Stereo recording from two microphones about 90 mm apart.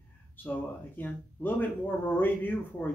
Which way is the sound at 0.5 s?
20° left (ahead or behind).